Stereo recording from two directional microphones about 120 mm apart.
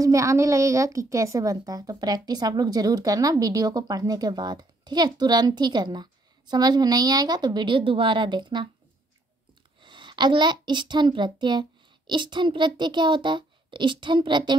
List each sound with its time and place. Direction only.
0.0 s a woman's voice: 25° right (ahead or behind)
9.8 s a woman's voice: 40° right (ahead or behind)